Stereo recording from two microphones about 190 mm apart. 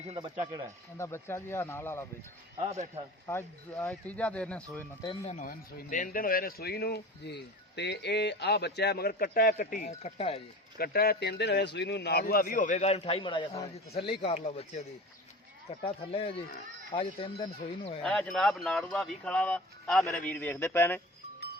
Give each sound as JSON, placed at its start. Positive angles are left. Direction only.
{"t": 0.1, "sound": "speech", "side_deg": -25}
{"t": 0.9, "sound": "speech", "side_deg": 15}
{"t": 2.6, "sound": "speech", "side_deg": -35}
{"t": 3.2, "sound": "speech", "side_deg": 10}
{"t": 5.3, "sound": "speech", "side_deg": 45}
{"t": 10.8, "sound": "speech", "side_deg": 55}
{"t": 15.8, "sound": "speech", "side_deg": 30}
{"t": 18.0, "sound": "speech", "side_deg": 5}